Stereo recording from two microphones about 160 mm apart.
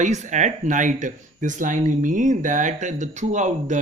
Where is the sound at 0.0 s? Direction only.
50° right (ahead or behind).